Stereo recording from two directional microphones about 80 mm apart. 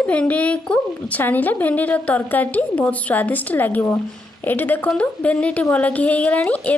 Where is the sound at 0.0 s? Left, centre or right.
Centre.